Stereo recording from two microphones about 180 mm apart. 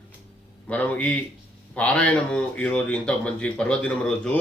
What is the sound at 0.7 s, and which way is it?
A man's voice, 10° left (ahead or behind).